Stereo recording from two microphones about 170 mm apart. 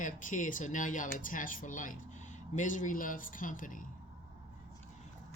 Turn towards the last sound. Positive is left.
turn(degrees=50)  # may be behind; listen again after turning